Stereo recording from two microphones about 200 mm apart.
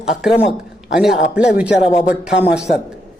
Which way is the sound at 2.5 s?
5° right (ahead or behind).